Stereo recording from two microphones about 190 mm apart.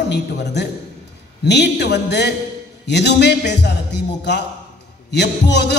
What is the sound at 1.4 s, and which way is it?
A man's voice, 65° left (ahead or behind).